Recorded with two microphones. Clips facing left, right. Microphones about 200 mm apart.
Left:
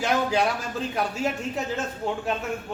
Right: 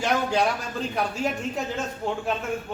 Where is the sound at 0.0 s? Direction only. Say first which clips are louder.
Even; centre (ahead or behind).